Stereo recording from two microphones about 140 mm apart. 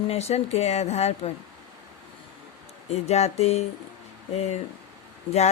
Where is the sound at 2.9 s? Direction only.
50° left (ahead or behind).